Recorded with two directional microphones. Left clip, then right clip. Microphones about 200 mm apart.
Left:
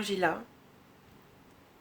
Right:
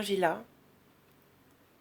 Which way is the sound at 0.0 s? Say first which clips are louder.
Right 1 dB; 40° right (ahead or behind).